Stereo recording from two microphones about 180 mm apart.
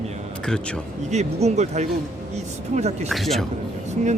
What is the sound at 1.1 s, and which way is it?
A man's voice, 35° right (ahead or behind).